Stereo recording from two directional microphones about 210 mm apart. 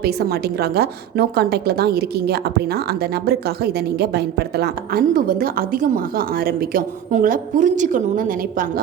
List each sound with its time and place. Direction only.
0.0 s a woman's voice: 50° right (ahead or behind)